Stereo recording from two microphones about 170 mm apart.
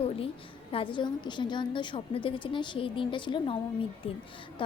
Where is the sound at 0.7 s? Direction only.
30° left (ahead or behind).